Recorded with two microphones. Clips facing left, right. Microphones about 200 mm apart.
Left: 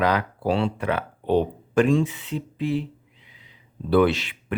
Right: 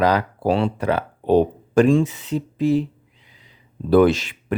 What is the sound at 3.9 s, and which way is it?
Speech, 45° right (ahead or behind).